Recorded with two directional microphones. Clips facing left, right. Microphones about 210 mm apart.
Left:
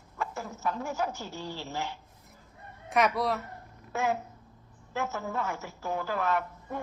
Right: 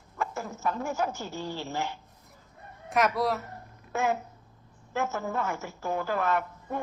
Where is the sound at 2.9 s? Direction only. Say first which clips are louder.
Right 1 dB; centre (ahead or behind).